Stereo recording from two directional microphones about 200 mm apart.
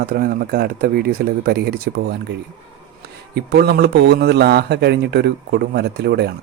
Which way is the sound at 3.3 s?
55° right (ahead or behind).